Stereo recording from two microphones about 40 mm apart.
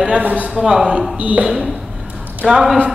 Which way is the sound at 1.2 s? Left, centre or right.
Right.